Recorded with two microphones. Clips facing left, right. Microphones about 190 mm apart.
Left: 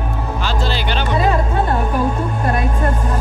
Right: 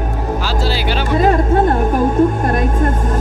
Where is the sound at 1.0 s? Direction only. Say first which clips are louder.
Right 4 dB; 45° right (ahead or behind).